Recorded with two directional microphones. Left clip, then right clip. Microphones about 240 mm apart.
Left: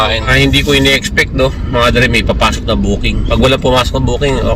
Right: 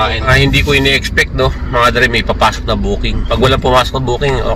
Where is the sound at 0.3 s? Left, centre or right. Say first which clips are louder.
Right 1 dB; centre.